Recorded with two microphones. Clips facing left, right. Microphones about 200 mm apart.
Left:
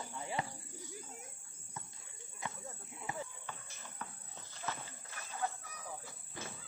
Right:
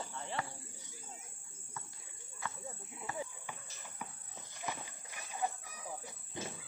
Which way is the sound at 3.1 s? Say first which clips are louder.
Right 2 dB; 15° right (ahead or behind).